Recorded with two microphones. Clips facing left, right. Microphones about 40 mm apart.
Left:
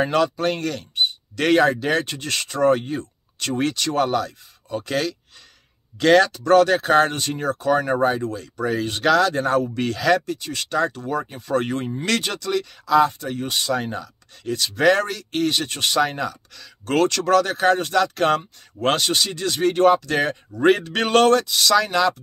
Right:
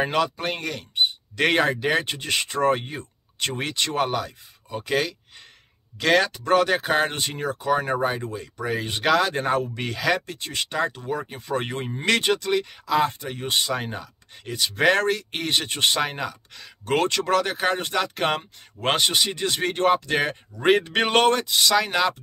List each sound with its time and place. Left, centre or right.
0.0 s speech: centre; by 2.8 s right
2.9 s a sound: right
3.9 s speech: centre
6.3 s speech: centre
8.2 s speech: right
9.8 s speech: centre
10.2 s speech: right
10.5 s speech: right
16.1 s speech: centre